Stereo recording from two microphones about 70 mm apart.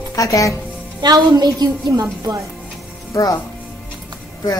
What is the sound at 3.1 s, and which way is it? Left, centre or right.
Speech, left.